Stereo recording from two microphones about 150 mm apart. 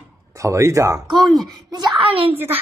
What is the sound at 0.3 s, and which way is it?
A woman's voice, 20° right (ahead or behind).